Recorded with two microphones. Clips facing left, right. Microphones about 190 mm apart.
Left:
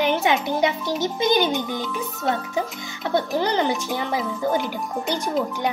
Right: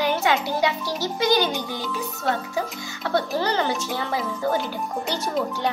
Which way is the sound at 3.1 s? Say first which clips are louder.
Left 1 dB; 20° left (ahead or behind).